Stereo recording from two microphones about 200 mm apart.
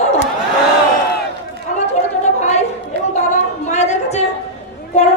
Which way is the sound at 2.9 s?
55° right (ahead or behind).